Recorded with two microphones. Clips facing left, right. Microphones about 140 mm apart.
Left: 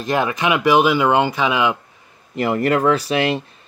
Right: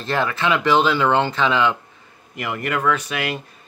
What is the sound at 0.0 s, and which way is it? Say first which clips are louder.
Speech: left 2 dB; 15° left (ahead or behind).